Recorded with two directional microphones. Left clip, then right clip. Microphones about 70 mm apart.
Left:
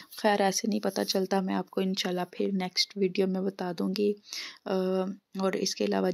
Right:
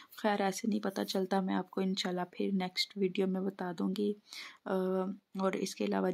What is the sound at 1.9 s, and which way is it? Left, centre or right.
Speech, centre.